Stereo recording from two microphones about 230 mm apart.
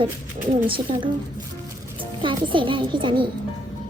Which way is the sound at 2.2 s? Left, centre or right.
Right.